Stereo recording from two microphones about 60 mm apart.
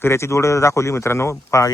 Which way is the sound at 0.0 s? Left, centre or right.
Left.